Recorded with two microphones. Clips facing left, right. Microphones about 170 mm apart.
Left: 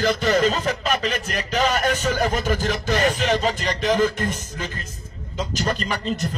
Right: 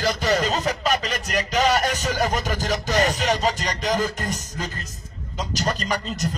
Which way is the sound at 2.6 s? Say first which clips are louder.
Left 1 dB; 40° right (ahead or behind).